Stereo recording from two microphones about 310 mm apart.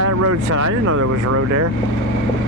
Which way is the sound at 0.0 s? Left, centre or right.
Right.